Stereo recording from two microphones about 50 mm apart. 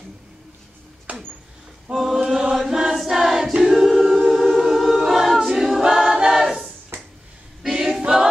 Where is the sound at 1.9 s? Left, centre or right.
Centre.